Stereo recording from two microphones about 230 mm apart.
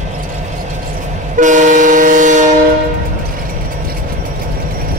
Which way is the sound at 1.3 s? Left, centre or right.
Right.